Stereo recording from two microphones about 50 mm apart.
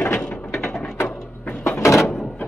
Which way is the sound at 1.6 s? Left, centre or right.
Left.